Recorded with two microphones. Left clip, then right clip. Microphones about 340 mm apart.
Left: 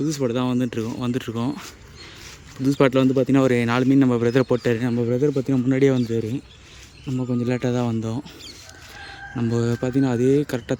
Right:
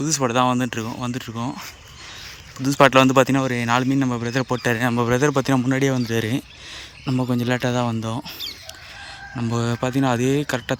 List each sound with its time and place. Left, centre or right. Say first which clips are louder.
0.0 s speech: right 4 dB; centre
6.1 s speech: right 3 dB; centre
7.4 s speech: right 1 dB; centre
9.4 s speech: even; centre